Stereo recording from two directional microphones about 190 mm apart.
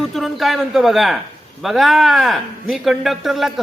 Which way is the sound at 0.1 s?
Centre (ahead or behind).